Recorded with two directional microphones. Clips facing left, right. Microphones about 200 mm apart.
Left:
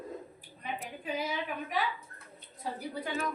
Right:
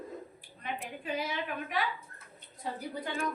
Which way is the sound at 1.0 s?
10° left (ahead or behind).